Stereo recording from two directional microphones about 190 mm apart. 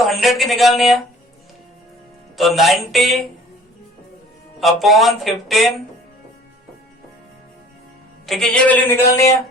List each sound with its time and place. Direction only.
0.0 s speech: centre (ahead or behind)
2.4 s speech: centre (ahead or behind)
4.6 s speech: centre (ahead or behind)
8.3 s speech: 5° left (ahead or behind)